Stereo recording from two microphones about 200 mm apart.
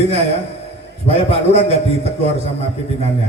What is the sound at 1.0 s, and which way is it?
Speech, 30° left (ahead or behind).